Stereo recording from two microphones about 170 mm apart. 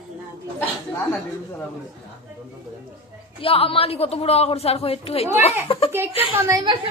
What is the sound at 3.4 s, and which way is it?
Speech, 35° left (ahead or behind).